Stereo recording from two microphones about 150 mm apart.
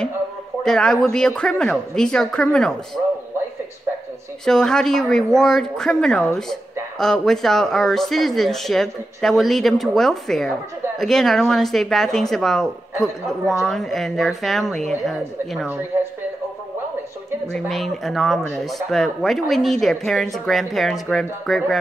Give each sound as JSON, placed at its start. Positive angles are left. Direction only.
{"t": 0.7, "sound": "speech", "side_deg": 5}
{"t": 4.5, "sound": "speech", "side_deg": 5}
{"t": 15.9, "sound": "a man's voice", "side_deg": -15}
{"t": 17.5, "sound": "speech", "side_deg": 0}